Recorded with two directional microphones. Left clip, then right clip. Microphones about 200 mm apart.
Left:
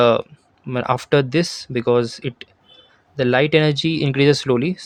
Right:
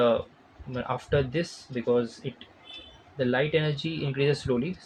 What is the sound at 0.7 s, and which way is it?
Speech, 60° left (ahead or behind).